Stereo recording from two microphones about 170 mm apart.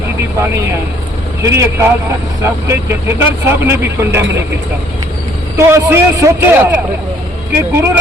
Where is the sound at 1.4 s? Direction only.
15° right (ahead or behind).